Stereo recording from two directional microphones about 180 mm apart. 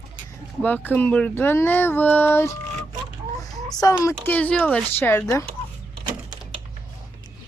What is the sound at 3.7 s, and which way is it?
Speech, 20° left (ahead or behind).